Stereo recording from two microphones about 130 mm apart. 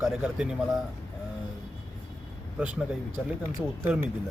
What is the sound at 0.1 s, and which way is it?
Speech, 5° right (ahead or behind).